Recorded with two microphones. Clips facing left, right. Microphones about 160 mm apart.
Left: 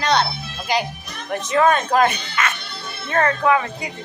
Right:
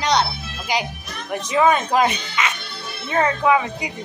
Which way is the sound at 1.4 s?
10° right (ahead or behind).